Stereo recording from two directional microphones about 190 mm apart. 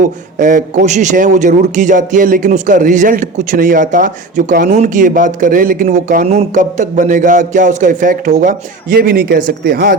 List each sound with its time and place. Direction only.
0.0 s a man's voice: 45° right (ahead or behind)